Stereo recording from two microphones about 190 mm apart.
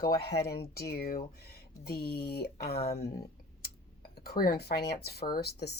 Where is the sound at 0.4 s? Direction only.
55° left (ahead or behind).